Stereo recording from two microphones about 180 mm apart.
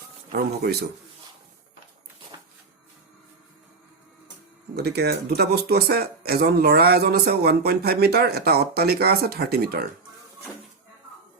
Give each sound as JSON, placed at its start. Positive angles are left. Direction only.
{"t": 0.3, "sound": "speech", "side_deg": -60}
{"t": 4.7, "sound": "speech", "side_deg": -65}